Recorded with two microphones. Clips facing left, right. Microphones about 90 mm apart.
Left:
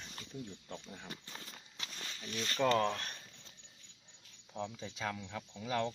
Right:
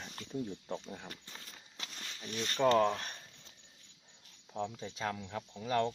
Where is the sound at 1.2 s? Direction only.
5° left (ahead or behind).